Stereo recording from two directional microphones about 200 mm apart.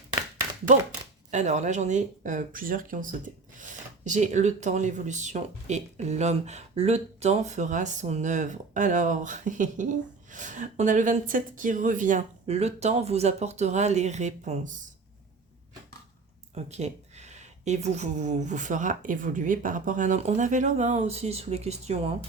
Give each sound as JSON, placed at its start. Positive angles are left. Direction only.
{"t": 1.3, "sound": "speech", "side_deg": -35}
{"t": 16.6, "sound": "speech", "side_deg": -35}